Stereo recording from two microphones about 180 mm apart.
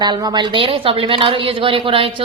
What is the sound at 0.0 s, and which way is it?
A woman's voice, 25° right (ahead or behind).